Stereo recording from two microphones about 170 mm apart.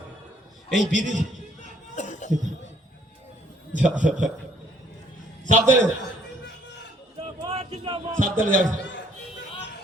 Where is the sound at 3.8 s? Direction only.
5° right (ahead or behind).